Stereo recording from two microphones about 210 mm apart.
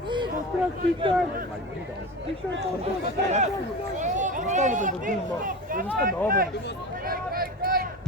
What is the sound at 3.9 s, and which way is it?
Speech, 35° right (ahead or behind).